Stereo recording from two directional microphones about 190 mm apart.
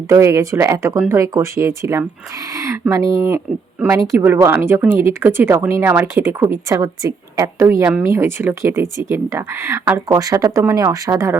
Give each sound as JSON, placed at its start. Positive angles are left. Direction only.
{"t": 0.1, "sound": "speech", "side_deg": -15}